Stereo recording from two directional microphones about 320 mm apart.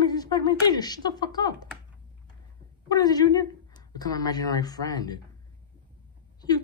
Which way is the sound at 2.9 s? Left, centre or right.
Centre.